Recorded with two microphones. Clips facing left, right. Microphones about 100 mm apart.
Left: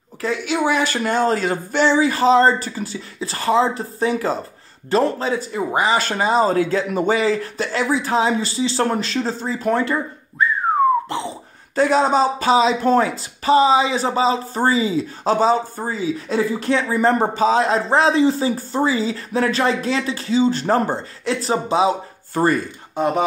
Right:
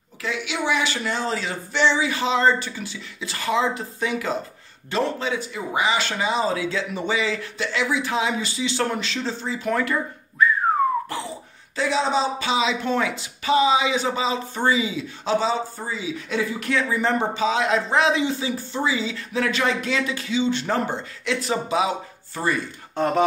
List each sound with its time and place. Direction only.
0.2 s speech: 45° left (ahead or behind)
11.1 s a sound: 25° left (ahead or behind)
11.7 s speech: 45° left (ahead or behind)
22.3 s speech: 50° left (ahead or behind)
22.9 s speech: 10° left (ahead or behind)